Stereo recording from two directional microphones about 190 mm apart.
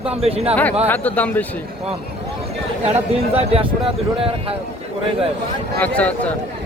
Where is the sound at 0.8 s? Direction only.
10° left (ahead or behind).